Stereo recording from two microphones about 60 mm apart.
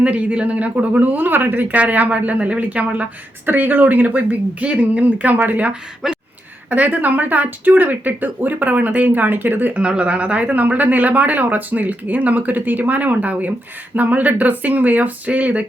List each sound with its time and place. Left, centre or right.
0.0 s speech: right
6.0 s speech: centre
6.7 s speech: right
9.8 s speech: centre